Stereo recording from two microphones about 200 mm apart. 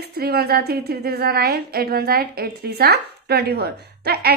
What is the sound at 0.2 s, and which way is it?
A woman's voice, 50° right (ahead or behind).